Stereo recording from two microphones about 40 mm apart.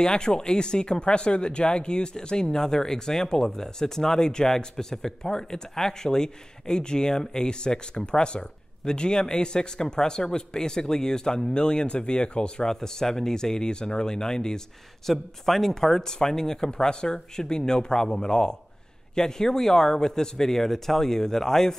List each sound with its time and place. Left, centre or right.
0.0 s speech: centre